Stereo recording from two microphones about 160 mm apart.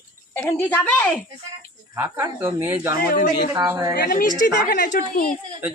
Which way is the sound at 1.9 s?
15° right (ahead or behind).